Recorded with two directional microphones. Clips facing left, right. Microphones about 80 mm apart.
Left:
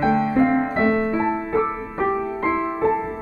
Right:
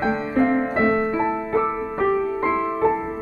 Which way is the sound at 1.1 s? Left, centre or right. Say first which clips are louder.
Even; left.